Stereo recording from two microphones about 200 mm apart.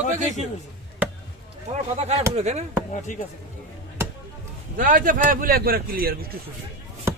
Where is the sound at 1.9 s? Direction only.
30° right (ahead or behind).